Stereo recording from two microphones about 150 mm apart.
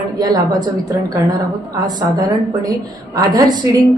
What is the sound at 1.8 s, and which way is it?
A woman's voice, 25° right (ahead or behind).